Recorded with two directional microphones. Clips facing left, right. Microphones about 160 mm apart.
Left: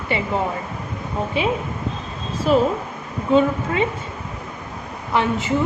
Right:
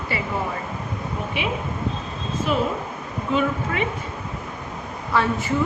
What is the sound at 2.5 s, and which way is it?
Speech, 40° left (ahead or behind).